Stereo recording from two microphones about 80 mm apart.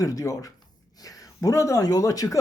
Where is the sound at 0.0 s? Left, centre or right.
Left.